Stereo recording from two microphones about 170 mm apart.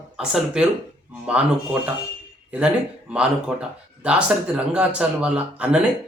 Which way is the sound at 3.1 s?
5° right (ahead or behind).